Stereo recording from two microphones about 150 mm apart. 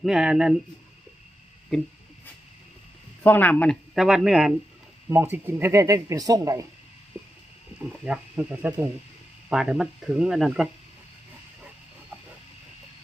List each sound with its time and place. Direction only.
0.0 s speech: 5° right (ahead or behind)
3.2 s speech: 10° left (ahead or behind)
3.9 s speech: 5° right (ahead or behind)
5.0 s speech: 15° right (ahead or behind)
8.0 s speech: 5° right (ahead or behind)